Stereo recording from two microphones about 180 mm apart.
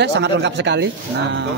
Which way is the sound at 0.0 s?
70° right (ahead or behind).